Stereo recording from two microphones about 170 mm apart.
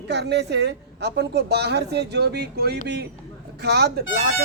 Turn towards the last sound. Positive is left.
turn(degrees=-65)  # may be behind; listen again after turning